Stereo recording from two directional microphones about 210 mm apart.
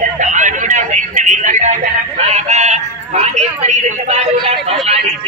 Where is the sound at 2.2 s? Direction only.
35° right (ahead or behind).